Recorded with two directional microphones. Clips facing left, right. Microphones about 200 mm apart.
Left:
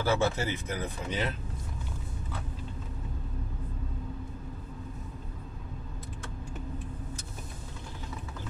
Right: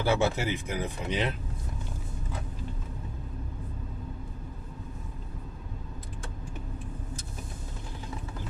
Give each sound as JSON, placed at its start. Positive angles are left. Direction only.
{"t": 0.0, "sound": "speech", "side_deg": -15}